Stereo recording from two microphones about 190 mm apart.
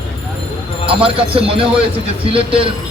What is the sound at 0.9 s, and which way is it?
Speech, 30° right (ahead or behind).